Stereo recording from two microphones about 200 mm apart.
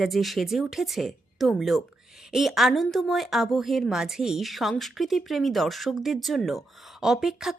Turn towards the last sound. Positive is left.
turn(degrees=0)  # may be behind; listen again after turning